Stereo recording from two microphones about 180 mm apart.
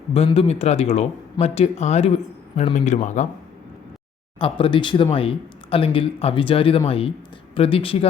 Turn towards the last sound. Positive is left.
turn(degrees=30)  # may be behind; listen again after turning